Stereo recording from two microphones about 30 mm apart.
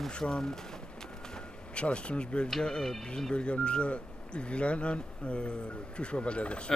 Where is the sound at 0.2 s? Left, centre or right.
Left.